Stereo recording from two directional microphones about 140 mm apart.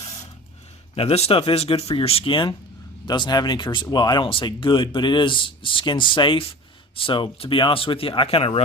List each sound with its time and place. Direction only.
0.9 s speech: 45° left (ahead or behind)